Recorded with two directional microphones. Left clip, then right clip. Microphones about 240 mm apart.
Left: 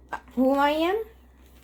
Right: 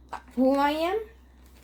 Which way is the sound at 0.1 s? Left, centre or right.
Left.